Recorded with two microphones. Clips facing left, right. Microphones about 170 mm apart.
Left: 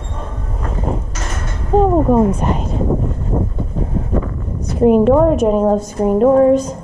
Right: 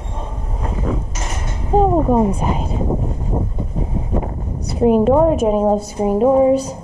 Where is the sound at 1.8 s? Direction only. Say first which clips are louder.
Left 2 dB; 15° right (ahead or behind).